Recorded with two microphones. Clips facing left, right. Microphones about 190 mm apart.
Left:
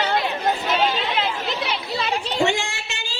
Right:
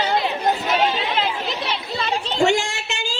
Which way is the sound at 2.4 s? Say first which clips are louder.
Right 4 dB; 45° right (ahead or behind).